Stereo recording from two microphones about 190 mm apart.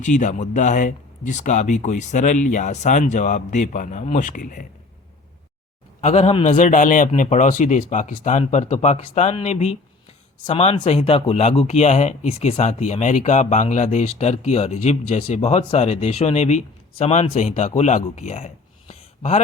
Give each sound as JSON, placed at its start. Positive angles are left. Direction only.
{"t": 0.0, "sound": "speech", "side_deg": 40}
{"t": 6.0, "sound": "a man's voice", "side_deg": 35}